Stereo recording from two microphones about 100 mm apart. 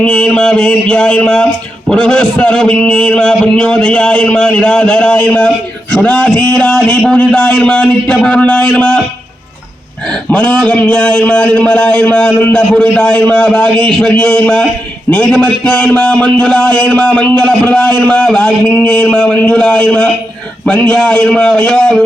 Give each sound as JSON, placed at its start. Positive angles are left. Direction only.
{"t": 0.0, "sound": "a man's voice", "side_deg": 10}
{"t": 10.2, "sound": "a man's voice", "side_deg": 10}
{"t": 12.9, "sound": "a man's voice", "side_deg": 10}